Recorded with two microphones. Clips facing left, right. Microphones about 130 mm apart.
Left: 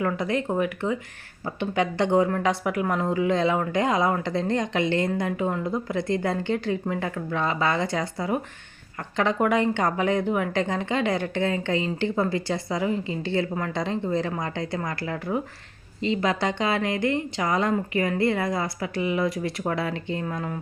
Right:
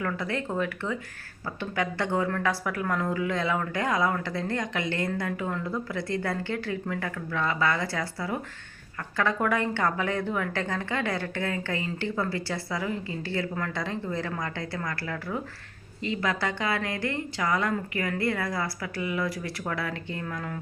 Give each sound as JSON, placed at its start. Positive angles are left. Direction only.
{"t": 0.0, "sound": "speech", "side_deg": 20}